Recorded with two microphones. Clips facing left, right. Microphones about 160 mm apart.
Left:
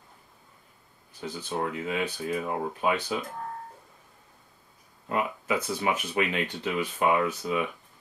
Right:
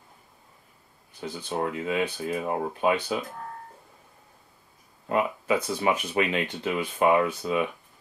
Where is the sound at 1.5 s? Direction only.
20° right (ahead or behind).